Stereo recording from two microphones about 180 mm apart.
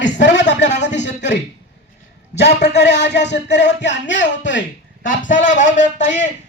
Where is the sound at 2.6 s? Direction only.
75° left (ahead or behind); by 4.6 s 90° left.